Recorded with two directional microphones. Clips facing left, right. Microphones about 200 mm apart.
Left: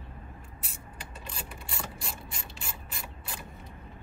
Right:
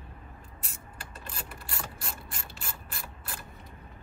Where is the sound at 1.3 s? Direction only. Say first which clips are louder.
Even; centre (ahead or behind).